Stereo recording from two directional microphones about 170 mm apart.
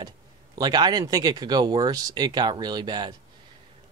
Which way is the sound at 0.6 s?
25° right (ahead or behind).